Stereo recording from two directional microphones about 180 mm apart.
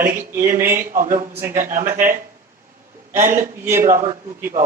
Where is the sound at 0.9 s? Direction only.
50° right (ahead or behind).